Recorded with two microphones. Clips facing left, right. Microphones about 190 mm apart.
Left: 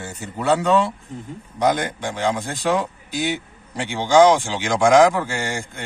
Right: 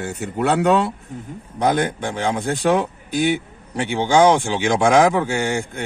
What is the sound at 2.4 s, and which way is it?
Speech, 60° right (ahead or behind).